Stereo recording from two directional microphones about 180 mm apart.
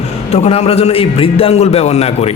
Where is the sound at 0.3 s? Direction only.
35° left (ahead or behind).